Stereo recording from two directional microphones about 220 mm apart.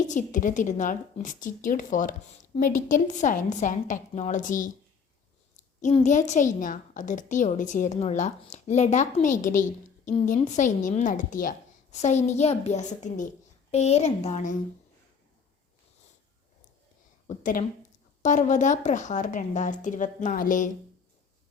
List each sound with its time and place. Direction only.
0.1 s a woman's voice: 35° left (ahead or behind)
5.8 s a woman's voice: 35° left (ahead or behind)
17.2 s a woman's voice: 35° left (ahead or behind)